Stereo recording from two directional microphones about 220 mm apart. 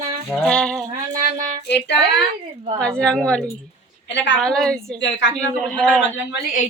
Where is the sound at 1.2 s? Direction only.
40° right (ahead or behind).